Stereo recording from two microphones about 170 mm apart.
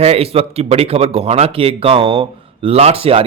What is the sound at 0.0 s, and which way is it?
Speech, 35° right (ahead or behind).